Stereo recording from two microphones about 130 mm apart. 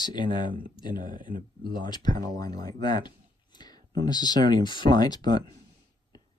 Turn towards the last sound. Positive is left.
turn(degrees=30)  # may be behind; listen again after turning